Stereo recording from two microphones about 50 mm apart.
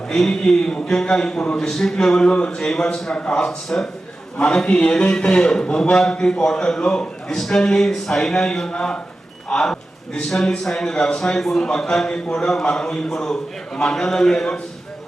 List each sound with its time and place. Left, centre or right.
0.1 s a man's voice: centre